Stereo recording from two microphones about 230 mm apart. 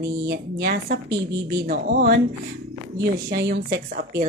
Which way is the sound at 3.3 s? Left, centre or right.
Right.